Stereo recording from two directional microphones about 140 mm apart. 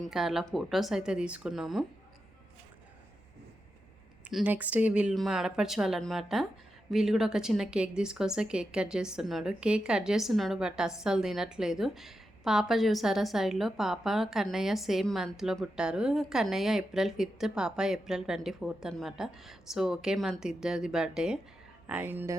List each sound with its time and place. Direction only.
0.0 s a woman's voice: centre (ahead or behind)
4.3 s a woman's voice: 5° right (ahead or behind)